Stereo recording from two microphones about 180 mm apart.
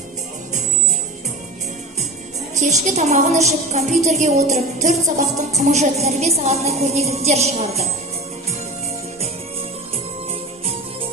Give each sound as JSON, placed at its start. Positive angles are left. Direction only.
{"t": 2.6, "sound": "music", "side_deg": -40}